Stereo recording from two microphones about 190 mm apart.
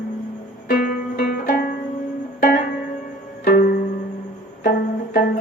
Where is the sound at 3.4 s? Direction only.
50° left (ahead or behind).